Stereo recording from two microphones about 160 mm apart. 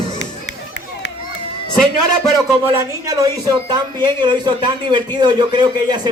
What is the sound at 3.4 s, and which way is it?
A man's voice, 25° right (ahead or behind).